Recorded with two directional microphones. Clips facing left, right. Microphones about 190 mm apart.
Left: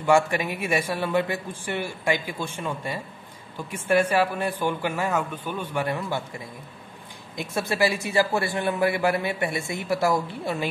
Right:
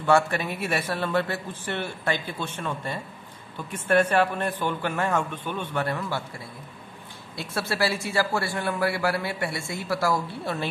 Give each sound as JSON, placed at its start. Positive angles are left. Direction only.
{"t": 0.0, "sound": "a man's voice", "side_deg": 15}